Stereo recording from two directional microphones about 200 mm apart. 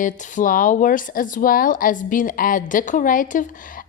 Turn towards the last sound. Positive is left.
turn(degrees=40)  # may be behind; listen again after turning